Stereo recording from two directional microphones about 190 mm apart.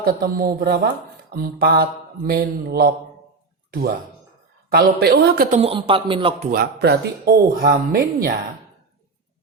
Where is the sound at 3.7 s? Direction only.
55° right (ahead or behind).